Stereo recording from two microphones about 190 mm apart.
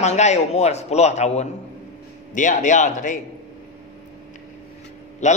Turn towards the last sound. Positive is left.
turn(degrees=35)  # may be behind; listen again after turning